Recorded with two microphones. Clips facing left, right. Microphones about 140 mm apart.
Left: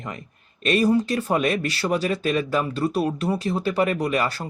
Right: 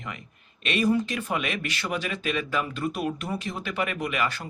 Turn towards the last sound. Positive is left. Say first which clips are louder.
# left 5 dB
turn(degrees=40)  # may be behind; listen again after turning